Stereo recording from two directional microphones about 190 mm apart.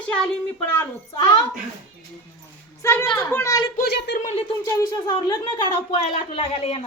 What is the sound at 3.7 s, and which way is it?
Speech, 60° left (ahead or behind).